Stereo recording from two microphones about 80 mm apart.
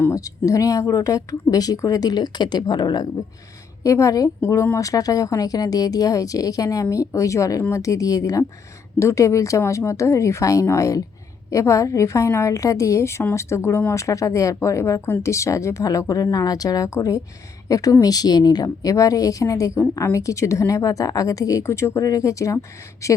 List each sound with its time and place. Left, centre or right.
0.1 s speech: left
3.8 s speech: left